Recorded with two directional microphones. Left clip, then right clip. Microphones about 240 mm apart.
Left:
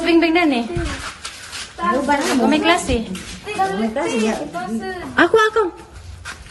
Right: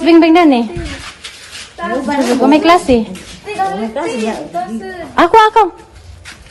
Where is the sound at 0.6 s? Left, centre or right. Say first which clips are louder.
Right 3 dB; centre.